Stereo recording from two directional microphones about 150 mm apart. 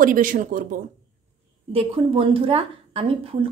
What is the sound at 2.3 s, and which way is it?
Speech, 40° right (ahead or behind).